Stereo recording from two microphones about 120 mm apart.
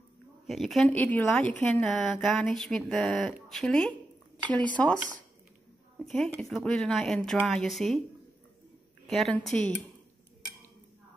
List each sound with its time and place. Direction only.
0.5 s a woman's voice: centre (ahead or behind)
5.9 s speech: 5° left (ahead or behind)
9.0 s a woman's voice: centre (ahead or behind)